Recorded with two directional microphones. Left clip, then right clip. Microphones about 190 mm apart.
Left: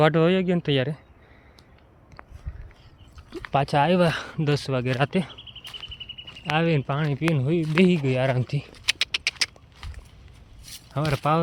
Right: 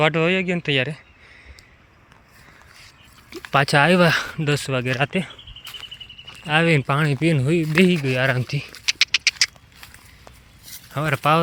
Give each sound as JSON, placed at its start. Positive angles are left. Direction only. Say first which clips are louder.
{"t": 0.0, "sound": "speech", "louder": "right 1 dB", "side_deg": 20}
{"t": 2.8, "sound": "a sound", "louder": "right 7 dB", "side_deg": 15}
{"t": 3.4, "sound": "speech", "louder": "right 5 dB", "side_deg": -15}
{"t": 4.3, "sound": "speech", "louder": "right 3 dB", "side_deg": 0}
{"t": 6.4, "sound": "speech", "louder": "right 5 dB", "side_deg": -10}
{"t": 6.7, "sound": "speech", "louder": "right 6 dB", "side_deg": -25}
{"t": 7.6, "sound": "speech", "louder": "right 2 dB", "side_deg": -15}
{"t": 10.9, "sound": "speech", "louder": "right 5 dB", "side_deg": 0}